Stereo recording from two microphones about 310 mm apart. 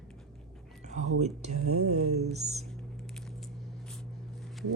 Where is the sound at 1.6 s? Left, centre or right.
Right.